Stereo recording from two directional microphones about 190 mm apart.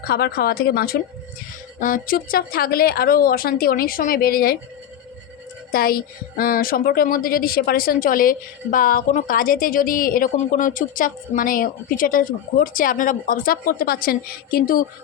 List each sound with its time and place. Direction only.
0.0 s a woman's voice: 55° left (ahead or behind)
5.7 s a woman's voice: 50° left (ahead or behind)